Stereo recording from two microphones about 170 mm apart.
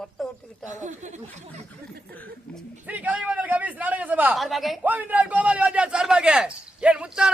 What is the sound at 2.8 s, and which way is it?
A man's voice, 10° right (ahead or behind).